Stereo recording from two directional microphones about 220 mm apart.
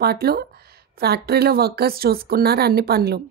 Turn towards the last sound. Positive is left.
turn(degrees=-45)  # may be behind; listen again after turning